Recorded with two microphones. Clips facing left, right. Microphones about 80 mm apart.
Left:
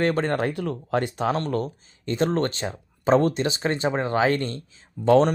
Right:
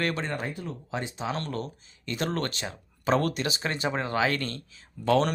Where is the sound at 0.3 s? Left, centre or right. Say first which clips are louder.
Left 9 dB; left.